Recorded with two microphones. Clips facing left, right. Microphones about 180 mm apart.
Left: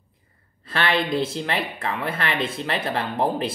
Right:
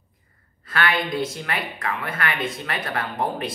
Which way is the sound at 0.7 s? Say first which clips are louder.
Left 1 dB; 30° left (ahead or behind).